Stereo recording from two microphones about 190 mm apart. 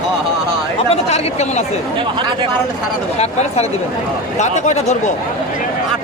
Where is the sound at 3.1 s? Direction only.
35° left (ahead or behind).